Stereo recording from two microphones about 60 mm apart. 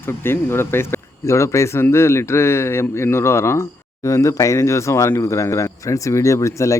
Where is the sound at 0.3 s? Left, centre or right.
Left.